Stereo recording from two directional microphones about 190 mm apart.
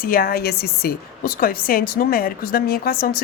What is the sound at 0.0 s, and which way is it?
Speech, 50° left (ahead or behind).